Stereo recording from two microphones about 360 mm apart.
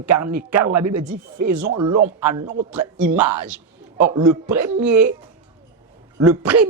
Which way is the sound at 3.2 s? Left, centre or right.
Right.